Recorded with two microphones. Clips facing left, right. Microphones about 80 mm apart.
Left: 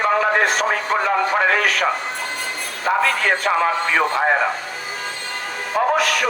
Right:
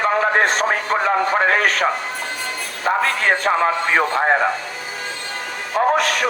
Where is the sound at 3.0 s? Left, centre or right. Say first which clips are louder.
Even; right.